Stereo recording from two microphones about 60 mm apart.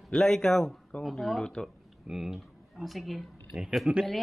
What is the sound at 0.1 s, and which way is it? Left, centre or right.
Speech, centre.